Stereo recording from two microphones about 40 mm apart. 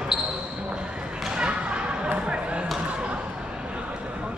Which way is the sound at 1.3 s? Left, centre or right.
Right.